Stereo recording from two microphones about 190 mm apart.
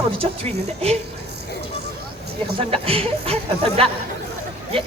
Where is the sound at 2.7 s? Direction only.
30° right (ahead or behind).